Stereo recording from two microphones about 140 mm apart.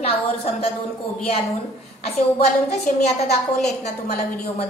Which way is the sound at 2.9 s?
80° left.